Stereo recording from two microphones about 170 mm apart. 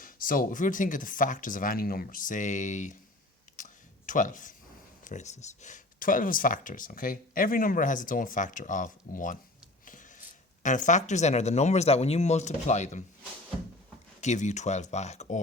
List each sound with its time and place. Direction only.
0.0 s speech: 55° left (ahead or behind)
3.6 s a sound: 50° left (ahead or behind)
5.0 s speech: 45° left (ahead or behind)
14.2 s speech: 45° left (ahead or behind)